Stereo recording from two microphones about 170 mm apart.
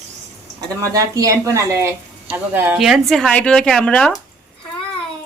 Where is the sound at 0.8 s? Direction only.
20° right (ahead or behind).